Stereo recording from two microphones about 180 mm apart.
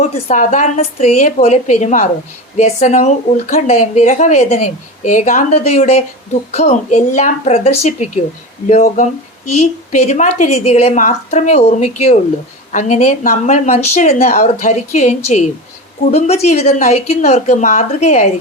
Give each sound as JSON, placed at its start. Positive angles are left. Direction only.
{"t": 0.0, "sound": "a woman's voice", "side_deg": 40}